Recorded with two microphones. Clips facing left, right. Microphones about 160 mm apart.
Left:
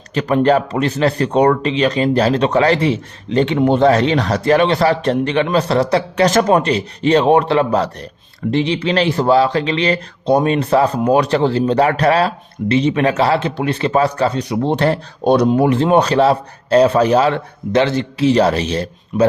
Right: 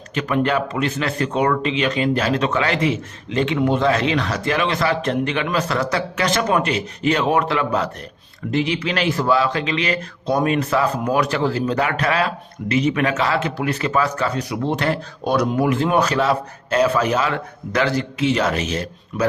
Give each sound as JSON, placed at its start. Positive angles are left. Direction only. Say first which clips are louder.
{"t": 0.1, "sound": "speech", "louder": "left 6 dB", "side_deg": 35}